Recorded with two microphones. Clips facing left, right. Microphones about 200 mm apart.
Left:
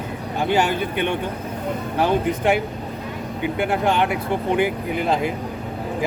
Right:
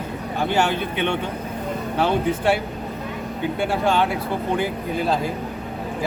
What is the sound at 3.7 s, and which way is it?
Speech, 15° left (ahead or behind).